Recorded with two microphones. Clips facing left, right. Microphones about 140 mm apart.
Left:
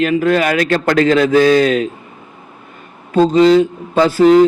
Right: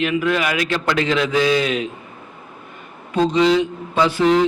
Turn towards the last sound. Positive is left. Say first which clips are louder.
# left 7 dB
turn(degrees=40)  # may be behind; listen again after turning